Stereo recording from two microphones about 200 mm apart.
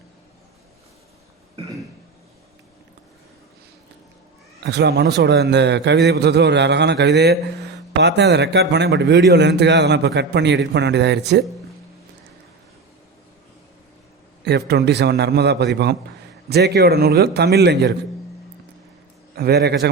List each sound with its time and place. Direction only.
4.6 s a man's voice: 55° right (ahead or behind)
14.4 s a man's voice: 55° right (ahead or behind)
19.4 s a man's voice: 55° right (ahead or behind)